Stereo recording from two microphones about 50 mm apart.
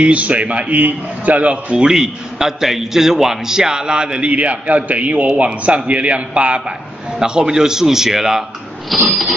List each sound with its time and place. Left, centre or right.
0.0 s a man's voice: right; by 9.0 s centre